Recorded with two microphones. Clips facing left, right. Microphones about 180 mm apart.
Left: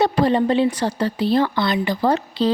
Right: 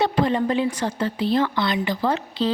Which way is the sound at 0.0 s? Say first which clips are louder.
Left 3 dB; 35° left (ahead or behind).